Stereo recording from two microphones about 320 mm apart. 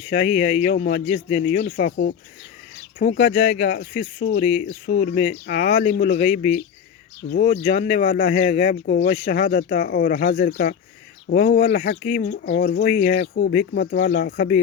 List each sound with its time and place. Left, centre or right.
0.1 s speech: left
3.8 s speech: left
4.3 s speech: centre
13.2 s speech: left
13.5 s speech: left